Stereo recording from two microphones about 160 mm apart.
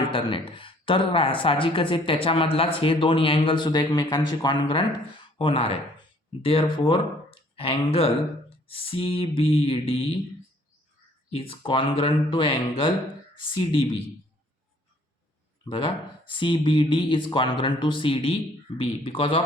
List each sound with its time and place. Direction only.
0.1 s speech: 30° left (ahead or behind)
11.3 s speech: 35° left (ahead or behind)
15.7 s speech: 30° left (ahead or behind)